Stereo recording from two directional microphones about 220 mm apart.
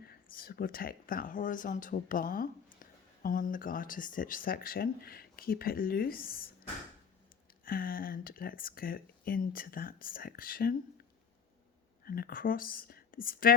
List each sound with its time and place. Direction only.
0.0 s speech: 45° left (ahead or behind)
7.6 s speech: 40° left (ahead or behind)
12.0 s speech: 45° left (ahead or behind)